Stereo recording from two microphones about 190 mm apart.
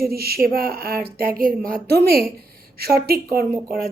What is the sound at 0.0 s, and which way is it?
A woman's voice, 55° right (ahead or behind).